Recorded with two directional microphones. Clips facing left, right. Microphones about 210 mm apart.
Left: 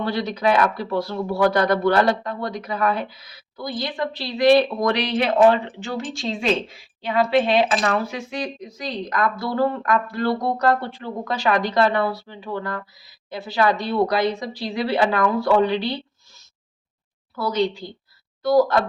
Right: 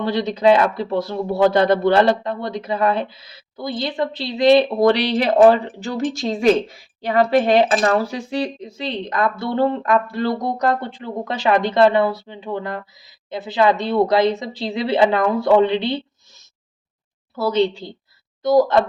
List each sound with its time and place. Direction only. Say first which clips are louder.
0.0 s a man's voice: right 5 dB; 20° right (ahead or behind)
17.3 s a man's voice: right 4 dB; 25° right (ahead or behind)